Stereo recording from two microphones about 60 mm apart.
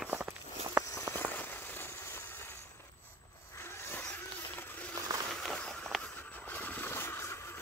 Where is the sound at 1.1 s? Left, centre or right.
Left.